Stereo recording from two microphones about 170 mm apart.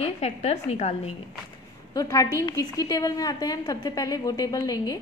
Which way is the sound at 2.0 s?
20° left (ahead or behind).